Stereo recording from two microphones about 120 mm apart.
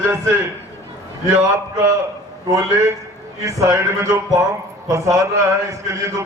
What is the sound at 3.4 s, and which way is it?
Speech, 25° right (ahead or behind).